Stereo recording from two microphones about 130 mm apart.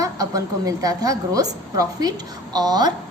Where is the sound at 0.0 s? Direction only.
25° right (ahead or behind).